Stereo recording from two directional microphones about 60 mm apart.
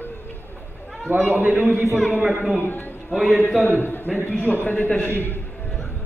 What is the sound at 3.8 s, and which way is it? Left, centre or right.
A man's voice, left.